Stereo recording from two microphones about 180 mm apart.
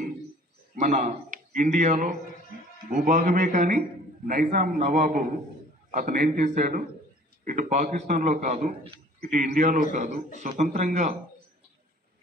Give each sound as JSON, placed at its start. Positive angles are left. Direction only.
{"t": 0.7, "sound": "a man's voice", "side_deg": -45}